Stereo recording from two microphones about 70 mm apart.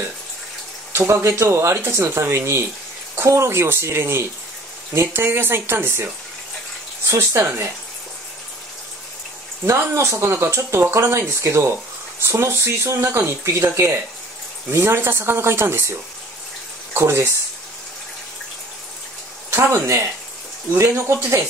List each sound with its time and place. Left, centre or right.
0.9 s speech: right
7.1 s speech: right
9.7 s speech: right
19.5 s speech: right